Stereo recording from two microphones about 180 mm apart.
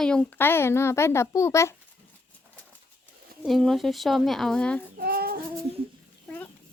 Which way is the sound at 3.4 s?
Centre (ahead or behind).